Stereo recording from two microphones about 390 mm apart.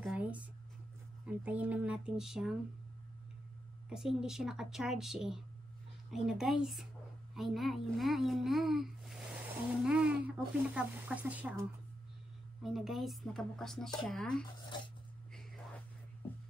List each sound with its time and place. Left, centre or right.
0.0 s a sound: centre
1.2 s a woman's voice: centre
3.9 s a woman's voice: centre
12.6 s a woman's voice: centre